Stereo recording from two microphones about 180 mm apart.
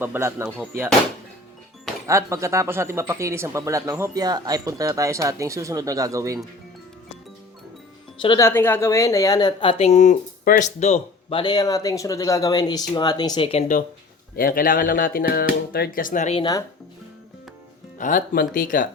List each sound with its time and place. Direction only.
0.0 s speech: 15° right (ahead or behind)
2.0 s speech: 15° right (ahead or behind)
8.4 s speech: 15° left (ahead or behind); by 13.8 s 40° left (ahead or behind)
14.3 s speech: 50° left (ahead or behind)
16.4 s speech: 20° left (ahead or behind)
17.9 s speech: 45° left (ahead or behind)